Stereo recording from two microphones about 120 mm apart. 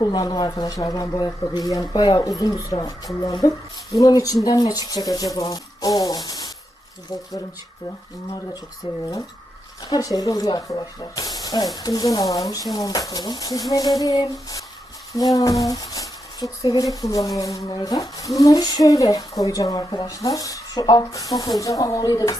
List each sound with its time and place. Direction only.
0.0 s speech: 35° left (ahead or behind)
3.9 s speech: 30° left (ahead or behind)
8.8 s speech: 45° left (ahead or behind)
9.9 s speech: 30° left (ahead or behind)